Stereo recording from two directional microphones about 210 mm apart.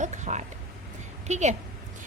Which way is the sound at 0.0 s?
35° right (ahead or behind).